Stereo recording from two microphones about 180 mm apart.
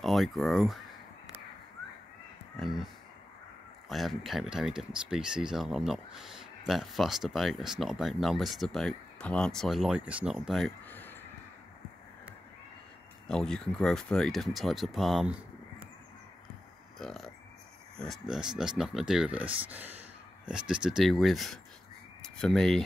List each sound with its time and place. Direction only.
0.0 s speech: centre (ahead or behind)
2.5 s speech: centre (ahead or behind)
3.9 s speech: centre (ahead or behind)
10.9 s a sound: 10° left (ahead or behind)
13.3 s speech: 5° left (ahead or behind)
17.0 s speech: centre (ahead or behind)